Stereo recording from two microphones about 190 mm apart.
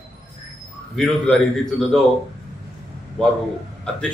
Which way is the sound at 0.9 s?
5° left (ahead or behind).